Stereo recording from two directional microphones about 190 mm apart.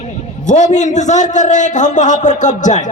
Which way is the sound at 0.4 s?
40° left (ahead or behind).